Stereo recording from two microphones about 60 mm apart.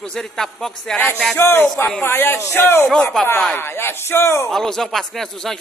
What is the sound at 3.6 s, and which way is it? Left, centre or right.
Speech, left.